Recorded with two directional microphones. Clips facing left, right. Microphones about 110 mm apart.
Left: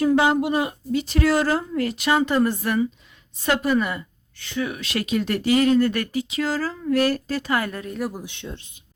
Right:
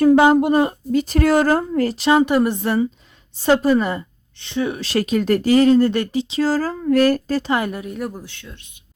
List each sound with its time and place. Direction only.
0.0 s a woman's voice: 45° right (ahead or behind)
2.1 s a woman's voice: 15° right (ahead or behind); by 7.4 s 40° right (ahead or behind)
7.4 s a woman's voice: 20° right (ahead or behind)
7.9 s speech: centre (ahead or behind)
8.2 s speech: 20° left (ahead or behind)